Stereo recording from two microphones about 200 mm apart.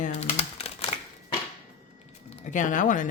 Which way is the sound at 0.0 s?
30° left (ahead or behind).